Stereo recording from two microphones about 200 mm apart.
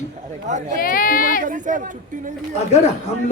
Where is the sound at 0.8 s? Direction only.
45° left (ahead or behind).